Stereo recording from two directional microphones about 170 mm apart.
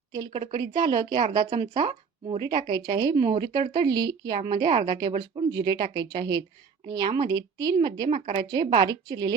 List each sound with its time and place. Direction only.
0.1 s speech: 25° right (ahead or behind)